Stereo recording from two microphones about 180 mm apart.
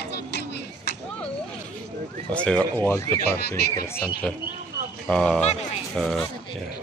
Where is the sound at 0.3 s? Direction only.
65° left (ahead or behind).